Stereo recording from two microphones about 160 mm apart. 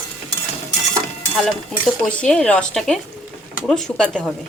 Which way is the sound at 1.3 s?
5° left (ahead or behind).